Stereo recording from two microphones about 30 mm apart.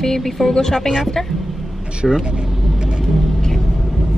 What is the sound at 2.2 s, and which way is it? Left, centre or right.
Vehicle, right.